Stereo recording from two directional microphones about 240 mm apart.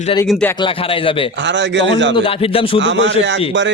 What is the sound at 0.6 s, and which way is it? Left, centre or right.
Speech, left.